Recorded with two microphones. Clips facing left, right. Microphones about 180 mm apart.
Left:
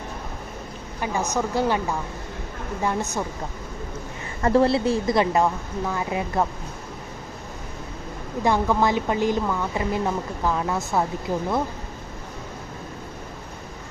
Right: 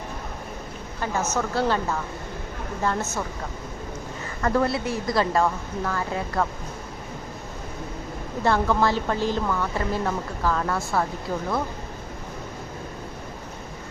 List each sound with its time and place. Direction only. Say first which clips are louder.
1.0 s a woman's voice: left 1 dB; 15° left (ahead or behind)
4.4 s speech: left 4 dB; 30° left (ahead or behind)
8.4 s a woman's voice: left 1 dB; 15° left (ahead or behind)